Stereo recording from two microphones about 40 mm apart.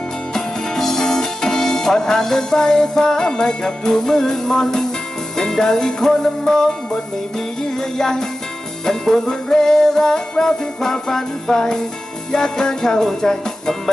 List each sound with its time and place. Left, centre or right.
0.3 s music: centre